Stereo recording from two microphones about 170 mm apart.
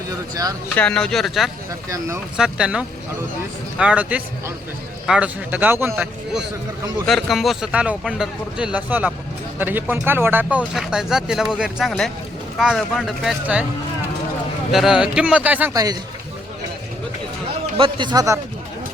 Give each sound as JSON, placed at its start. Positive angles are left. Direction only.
{"t": 0.8, "sound": "speech", "side_deg": 5}
{"t": 7.0, "sound": "speech", "side_deg": 0}
{"t": 14.7, "sound": "speech", "side_deg": 0}
{"t": 15.7, "sound": "a man's voice", "side_deg": -20}
{"t": 17.7, "sound": "a man's voice", "side_deg": -30}